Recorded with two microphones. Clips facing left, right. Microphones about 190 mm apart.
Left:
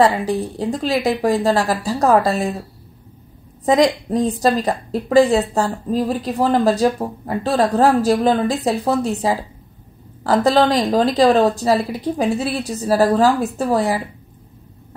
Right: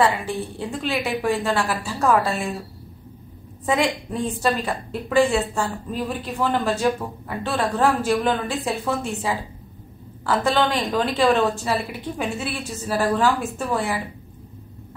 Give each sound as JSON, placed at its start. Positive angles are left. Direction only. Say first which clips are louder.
{"t": 0.0, "sound": "a woman's voice", "louder": "left 5 dB", "side_deg": 40}
{"t": 3.6, "sound": "a woman's voice", "louder": "left 7 dB", "side_deg": 40}